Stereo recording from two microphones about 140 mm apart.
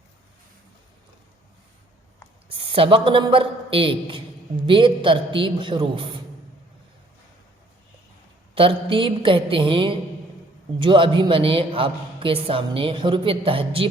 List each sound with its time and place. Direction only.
2.5 s a man's voice: 40° right (ahead or behind)
8.5 s a man's voice: 40° right (ahead or behind)